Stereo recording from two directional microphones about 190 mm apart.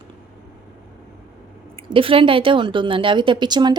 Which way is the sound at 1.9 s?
30° right (ahead or behind).